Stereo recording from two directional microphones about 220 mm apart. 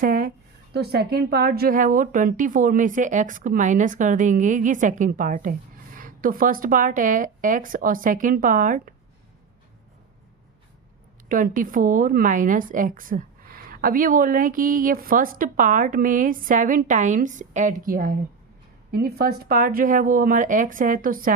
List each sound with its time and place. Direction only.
0.0 s a sound: 40° right (ahead or behind)
0.7 s a woman's voice: 45° right (ahead or behind)
11.3 s a woman's voice: 40° right (ahead or behind)